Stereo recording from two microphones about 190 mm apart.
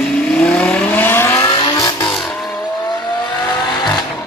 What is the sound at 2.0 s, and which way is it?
Vehicle, 5° left (ahead or behind).